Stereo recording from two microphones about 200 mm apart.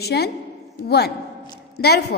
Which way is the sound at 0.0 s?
55° left (ahead or behind).